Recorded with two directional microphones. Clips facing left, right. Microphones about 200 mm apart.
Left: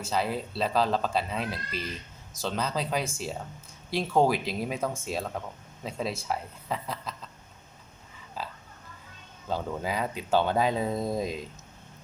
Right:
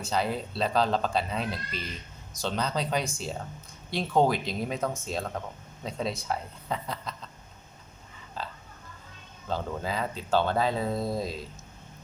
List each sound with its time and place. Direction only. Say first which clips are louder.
0.0 s speech: even; 5° left (ahead or behind)
8.4 s oink: even; 5° left (ahead or behind)
9.5 s speech: left 1 dB; 10° left (ahead or behind)